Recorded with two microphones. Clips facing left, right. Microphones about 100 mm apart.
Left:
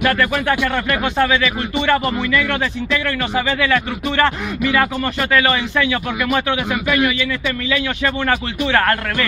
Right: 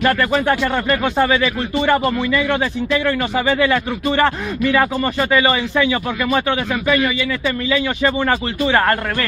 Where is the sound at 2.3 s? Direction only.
20° right (ahead or behind).